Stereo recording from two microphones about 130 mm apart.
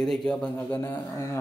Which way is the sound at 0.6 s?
15° left (ahead or behind).